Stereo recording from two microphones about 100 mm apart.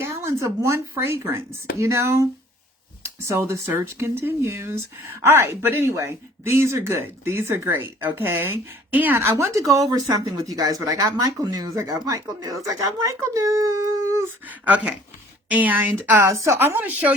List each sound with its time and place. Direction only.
0.0 s speech: 30° right (ahead or behind)
14.4 s a woman's voice: 15° right (ahead or behind)
16.2 s speech: 30° right (ahead or behind)